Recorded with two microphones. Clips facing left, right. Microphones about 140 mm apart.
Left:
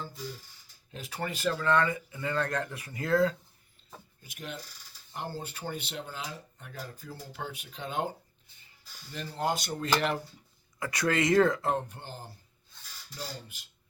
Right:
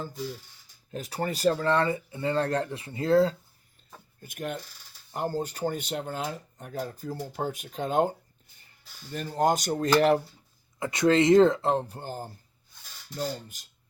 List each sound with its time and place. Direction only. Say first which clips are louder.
0.9 s speech: right 5 dB; 40° right (ahead or behind)
4.2 s speech: right 8 dB; 50° right (ahead or behind)
9.1 s speech: right 7 dB; 45° right (ahead or behind)
10.8 s speech: right 7 dB; 25° right (ahead or behind); by 13.7 s 45° right (ahead or behind)